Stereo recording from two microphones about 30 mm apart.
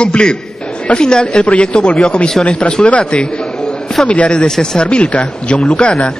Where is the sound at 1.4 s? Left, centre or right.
Left.